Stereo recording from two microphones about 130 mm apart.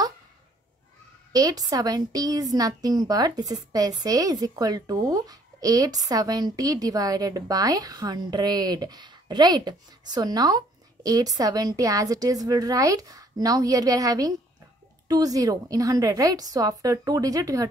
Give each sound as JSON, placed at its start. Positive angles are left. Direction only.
{"t": 1.3, "sound": "a woman's voice", "side_deg": -30}